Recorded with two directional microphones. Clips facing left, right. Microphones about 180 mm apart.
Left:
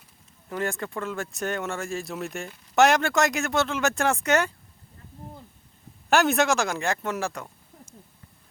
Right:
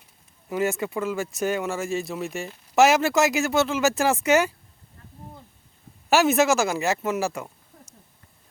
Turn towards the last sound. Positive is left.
turn(degrees=-5)  # may be behind; listen again after turning